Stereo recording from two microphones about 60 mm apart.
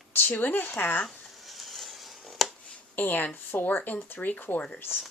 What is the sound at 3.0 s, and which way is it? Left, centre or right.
Speech, left.